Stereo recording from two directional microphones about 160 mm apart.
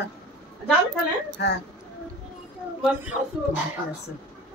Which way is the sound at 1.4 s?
90° left.